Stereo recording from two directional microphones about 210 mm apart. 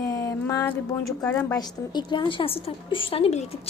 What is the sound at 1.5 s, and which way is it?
A woman's voice, 20° left (ahead or behind).